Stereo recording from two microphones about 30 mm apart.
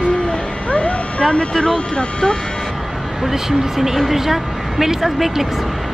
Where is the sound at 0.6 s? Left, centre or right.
Left.